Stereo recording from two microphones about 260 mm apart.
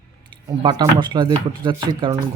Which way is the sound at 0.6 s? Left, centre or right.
Centre.